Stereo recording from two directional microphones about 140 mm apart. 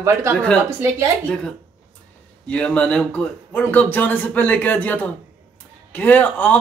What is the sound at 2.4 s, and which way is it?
A man's voice, 10° left (ahead or behind).